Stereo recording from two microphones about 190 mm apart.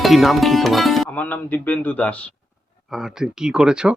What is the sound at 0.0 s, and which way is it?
Music, centre (ahead or behind).